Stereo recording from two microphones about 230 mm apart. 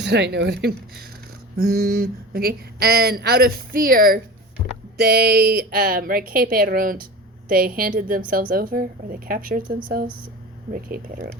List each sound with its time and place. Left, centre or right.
0.0 s a woman's voice: right